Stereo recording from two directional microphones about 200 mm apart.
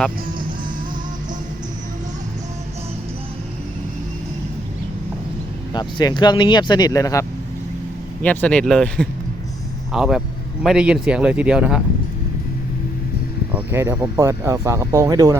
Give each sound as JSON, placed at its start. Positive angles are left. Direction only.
{"t": 5.7, "sound": "speech", "side_deg": 20}
{"t": 13.6, "sound": "speech", "side_deg": -10}